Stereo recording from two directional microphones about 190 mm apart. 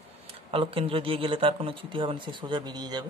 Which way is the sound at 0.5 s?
30° right (ahead or behind).